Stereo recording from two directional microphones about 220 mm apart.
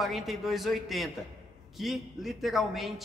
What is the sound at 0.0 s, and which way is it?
A man's voice, centre (ahead or behind).